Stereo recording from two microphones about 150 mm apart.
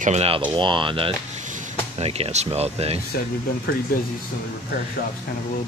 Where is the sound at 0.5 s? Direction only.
30° right (ahead or behind).